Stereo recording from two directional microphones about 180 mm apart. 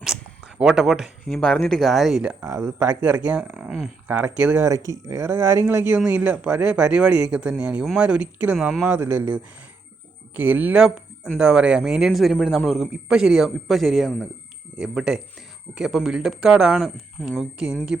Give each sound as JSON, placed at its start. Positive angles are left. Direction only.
{"t": 0.0, "sound": "speech", "side_deg": -5}
{"t": 2.4, "sound": "speech", "side_deg": -15}